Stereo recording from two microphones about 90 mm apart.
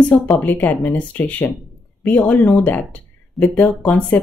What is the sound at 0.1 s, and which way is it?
Speech, 20° left (ahead or behind).